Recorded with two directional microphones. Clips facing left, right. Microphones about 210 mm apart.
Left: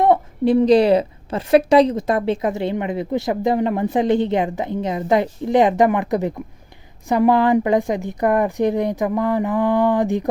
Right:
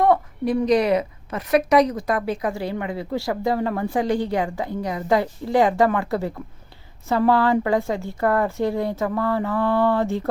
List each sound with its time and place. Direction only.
0.0 s a woman's voice: 25° left (ahead or behind)